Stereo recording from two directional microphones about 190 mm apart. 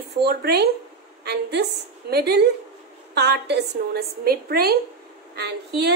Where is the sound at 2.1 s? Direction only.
55° right (ahead or behind).